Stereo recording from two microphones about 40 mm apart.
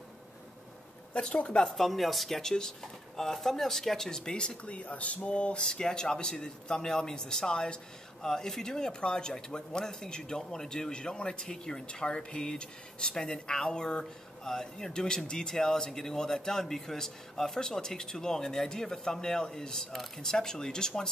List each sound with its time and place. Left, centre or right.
1.3 s speech: left
1.8 s speech: centre